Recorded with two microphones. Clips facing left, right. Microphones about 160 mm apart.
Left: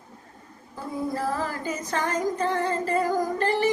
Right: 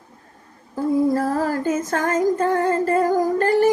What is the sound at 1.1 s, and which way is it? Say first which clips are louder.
Music: right 7 dB; 45° right (ahead or behind).